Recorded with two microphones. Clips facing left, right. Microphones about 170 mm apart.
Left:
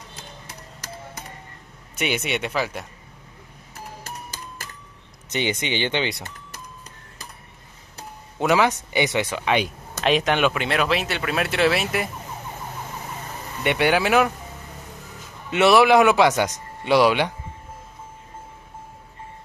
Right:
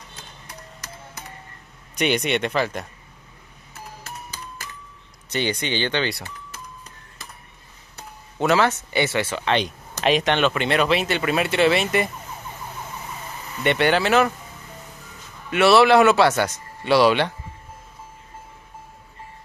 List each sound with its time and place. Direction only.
2.0 s speech: 5° left (ahead or behind)
5.3 s speech: 20° left (ahead or behind)
8.4 s speech: 15° left (ahead or behind)
13.7 s speech: 10° left (ahead or behind)
15.5 s speech: 15° left (ahead or behind)